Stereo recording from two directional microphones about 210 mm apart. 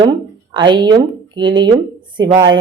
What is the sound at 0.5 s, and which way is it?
A woman's voice, 20° right (ahead or behind).